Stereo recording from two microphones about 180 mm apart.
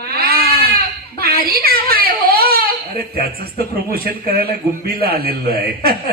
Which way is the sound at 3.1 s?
60° right (ahead or behind).